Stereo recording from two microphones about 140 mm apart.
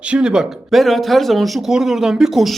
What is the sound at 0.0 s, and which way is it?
Speech, 5° right (ahead or behind).